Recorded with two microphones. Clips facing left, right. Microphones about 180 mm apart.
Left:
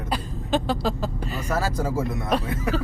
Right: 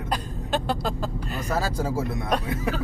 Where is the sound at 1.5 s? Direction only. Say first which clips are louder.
Left 1 dB; 10° right (ahead or behind).